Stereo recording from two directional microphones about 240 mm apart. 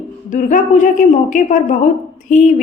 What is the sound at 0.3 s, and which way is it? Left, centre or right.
A woman's voice, left.